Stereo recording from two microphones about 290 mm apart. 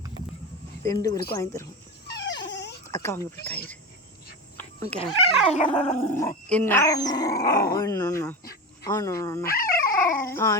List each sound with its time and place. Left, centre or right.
0.9 s speech: centre
2.2 s dog: left
2.8 s speech: centre
4.5 s a sound: centre
5.0 s speech: centre
7.4 s speech: left
7.8 s speech: centre
9.5 s dog: left
10.2 s speech: centre